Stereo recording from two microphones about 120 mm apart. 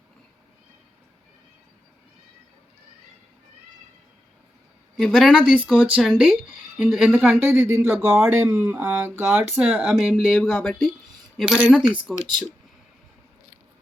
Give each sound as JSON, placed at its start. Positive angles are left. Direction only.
{"t": 4.9, "sound": "speech", "side_deg": 0}
{"t": 10.2, "sound": "speech", "side_deg": 5}
{"t": 11.8, "sound": "speech", "side_deg": -45}